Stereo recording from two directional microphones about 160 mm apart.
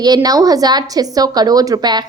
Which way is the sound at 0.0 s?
25° right (ahead or behind).